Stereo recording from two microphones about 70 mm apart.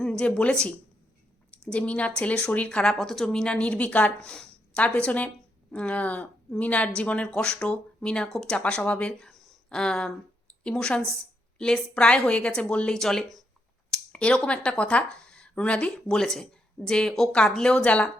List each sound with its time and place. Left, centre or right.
0.0 s speech: centre
9.1 s a sound: centre
9.6 s speech: centre